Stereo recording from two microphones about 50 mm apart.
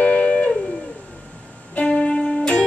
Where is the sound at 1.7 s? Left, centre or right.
Left.